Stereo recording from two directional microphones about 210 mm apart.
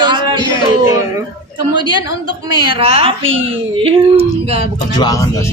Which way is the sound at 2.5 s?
20° right (ahead or behind).